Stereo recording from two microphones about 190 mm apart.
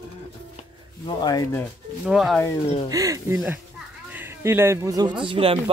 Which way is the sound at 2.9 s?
15° right (ahead or behind).